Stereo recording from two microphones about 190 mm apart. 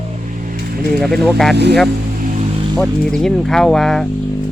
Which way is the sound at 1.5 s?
60° right (ahead or behind).